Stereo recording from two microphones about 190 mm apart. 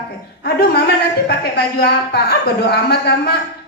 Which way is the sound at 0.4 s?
55° left (ahead or behind).